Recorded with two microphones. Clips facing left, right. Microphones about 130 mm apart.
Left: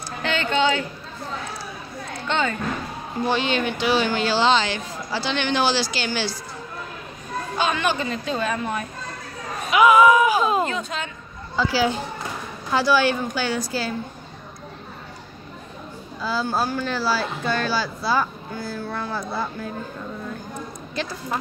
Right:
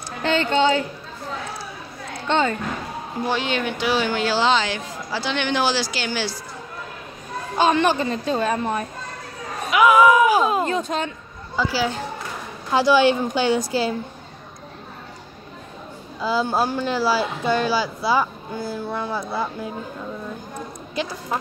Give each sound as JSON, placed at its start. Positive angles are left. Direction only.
{"t": 0.3, "sound": "a woman's voice", "side_deg": -35}
{"t": 3.3, "sound": "speech", "side_deg": -5}
{"t": 7.5, "sound": "a woman's voice", "side_deg": -35}
{"t": 9.7, "sound": "speech", "side_deg": 0}
{"t": 10.7, "sound": "a woman's voice", "side_deg": -40}
{"t": 11.5, "sound": "speech", "side_deg": -10}
{"t": 12.7, "sound": "a woman's voice", "side_deg": -20}
{"t": 16.2, "sound": "speech", "side_deg": -15}
{"t": 20.9, "sound": "speech", "side_deg": -15}